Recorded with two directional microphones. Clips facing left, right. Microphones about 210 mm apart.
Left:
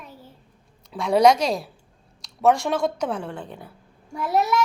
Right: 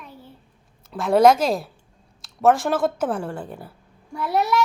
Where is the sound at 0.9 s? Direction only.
Centre (ahead or behind).